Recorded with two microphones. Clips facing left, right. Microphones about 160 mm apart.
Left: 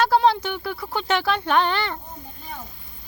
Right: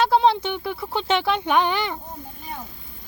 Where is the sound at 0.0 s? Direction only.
20° right (ahead or behind).